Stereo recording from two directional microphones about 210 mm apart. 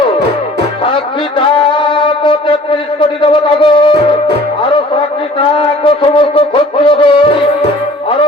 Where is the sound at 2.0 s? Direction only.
25° left (ahead or behind).